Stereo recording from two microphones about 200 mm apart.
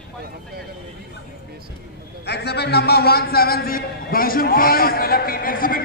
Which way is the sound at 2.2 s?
55° left (ahead or behind).